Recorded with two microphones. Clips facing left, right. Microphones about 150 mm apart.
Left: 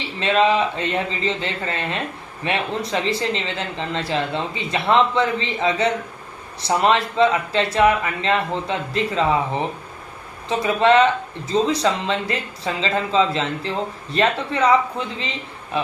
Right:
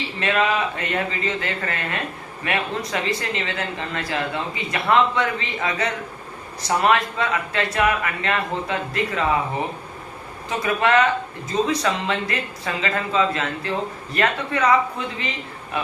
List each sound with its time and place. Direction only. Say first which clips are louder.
0.2 s speech: left 4 dB; 25° left (ahead or behind)
10.5 s speech: left 3 dB; 25° left (ahead or behind)